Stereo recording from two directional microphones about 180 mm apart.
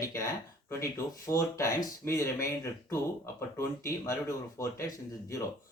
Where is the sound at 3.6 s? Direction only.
15° left (ahead or behind).